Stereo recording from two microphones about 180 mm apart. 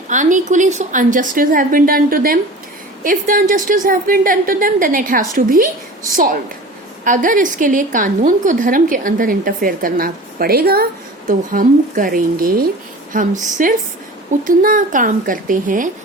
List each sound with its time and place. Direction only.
0.1 s a woman's voice: 45° right (ahead or behind)